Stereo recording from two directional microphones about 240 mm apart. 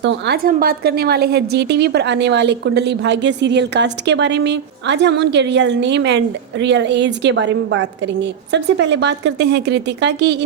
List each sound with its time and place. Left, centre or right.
0.0 s a woman's voice: right